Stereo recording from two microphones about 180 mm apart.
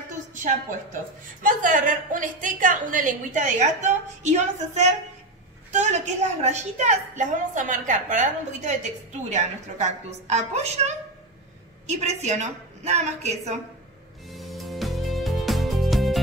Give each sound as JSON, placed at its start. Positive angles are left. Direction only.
{"t": 1.4, "sound": "a woman's voice", "side_deg": -45}
{"t": 12.0, "sound": "a woman's voice", "side_deg": -40}
{"t": 14.3, "sound": "music", "side_deg": 0}